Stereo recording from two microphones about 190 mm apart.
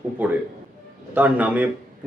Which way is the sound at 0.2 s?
10° right (ahead or behind).